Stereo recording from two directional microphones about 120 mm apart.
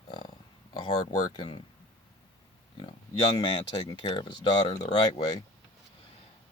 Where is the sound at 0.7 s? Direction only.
45° left (ahead or behind).